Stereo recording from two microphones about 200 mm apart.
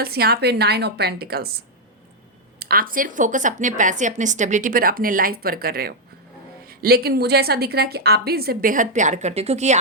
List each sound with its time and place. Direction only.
0.0 s speech: 50° right (ahead or behind)
2.6 s speech: 50° right (ahead or behind)